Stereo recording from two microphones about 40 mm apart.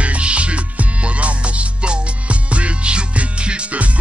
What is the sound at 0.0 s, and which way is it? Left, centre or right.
Music, right.